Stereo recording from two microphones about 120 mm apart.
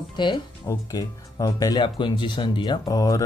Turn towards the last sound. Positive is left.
turn(degrees=30)  # may be behind; listen again after turning